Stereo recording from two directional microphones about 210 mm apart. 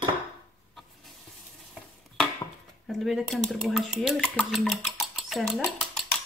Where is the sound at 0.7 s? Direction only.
Centre (ahead or behind).